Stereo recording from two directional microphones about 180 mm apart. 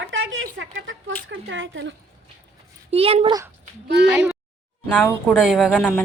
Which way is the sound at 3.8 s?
70° right (ahead or behind).